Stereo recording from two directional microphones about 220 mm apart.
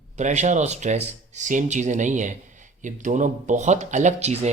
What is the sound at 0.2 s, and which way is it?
Speech, 30° right (ahead or behind).